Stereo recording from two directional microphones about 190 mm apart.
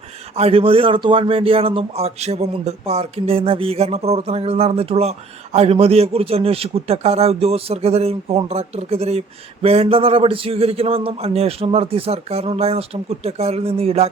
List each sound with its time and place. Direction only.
0.3 s speech: 30° right (ahead or behind)